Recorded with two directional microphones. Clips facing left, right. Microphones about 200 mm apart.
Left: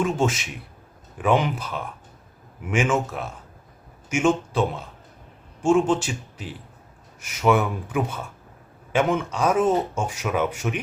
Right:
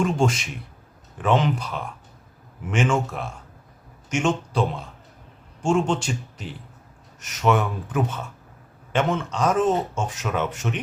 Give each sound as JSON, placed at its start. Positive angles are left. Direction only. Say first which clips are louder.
{"t": 0.0, "sound": "speech", "louder": "right 1 dB", "side_deg": 5}